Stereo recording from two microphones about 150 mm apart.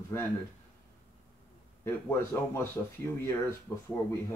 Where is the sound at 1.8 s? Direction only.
15° left (ahead or behind).